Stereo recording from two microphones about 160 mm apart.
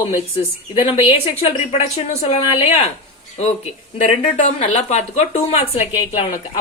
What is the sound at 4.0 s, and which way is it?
Speech, 45° left (ahead or behind).